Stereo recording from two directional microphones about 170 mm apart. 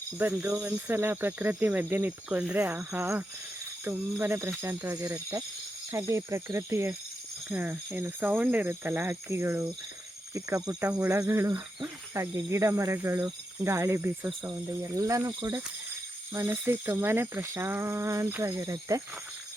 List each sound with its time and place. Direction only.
0.2 s speech: 15° right (ahead or behind)